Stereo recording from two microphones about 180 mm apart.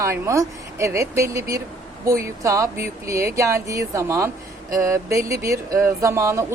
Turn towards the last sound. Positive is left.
turn(degrees=-15)  # may be behind; listen again after turning